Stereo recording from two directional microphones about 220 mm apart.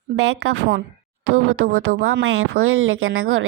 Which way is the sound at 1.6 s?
70° right (ahead or behind).